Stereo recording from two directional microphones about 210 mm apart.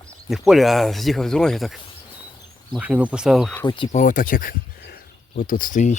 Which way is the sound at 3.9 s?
40° left (ahead or behind).